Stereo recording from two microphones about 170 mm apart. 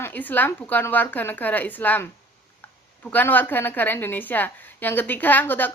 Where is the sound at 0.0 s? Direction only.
10° left (ahead or behind).